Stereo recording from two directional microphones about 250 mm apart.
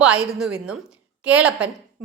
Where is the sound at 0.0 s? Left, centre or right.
Centre.